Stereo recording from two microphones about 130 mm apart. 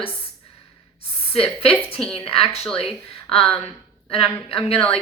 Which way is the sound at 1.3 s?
50° left (ahead or behind).